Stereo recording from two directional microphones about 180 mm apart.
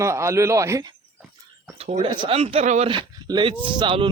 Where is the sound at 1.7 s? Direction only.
35° right (ahead or behind).